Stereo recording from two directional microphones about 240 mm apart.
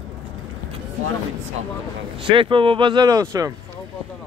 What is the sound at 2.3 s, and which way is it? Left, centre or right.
Speech, right.